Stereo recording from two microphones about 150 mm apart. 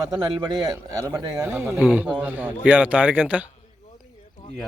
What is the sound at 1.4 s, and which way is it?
Speech, 10° right (ahead or behind).